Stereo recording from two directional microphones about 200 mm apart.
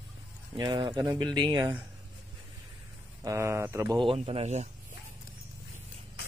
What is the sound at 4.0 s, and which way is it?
Speech, 30° right (ahead or behind).